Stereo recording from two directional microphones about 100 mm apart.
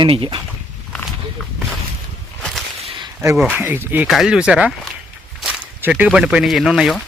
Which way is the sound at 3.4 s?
20° right (ahead or behind).